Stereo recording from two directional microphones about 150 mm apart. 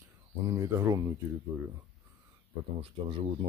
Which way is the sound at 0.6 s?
20° right (ahead or behind).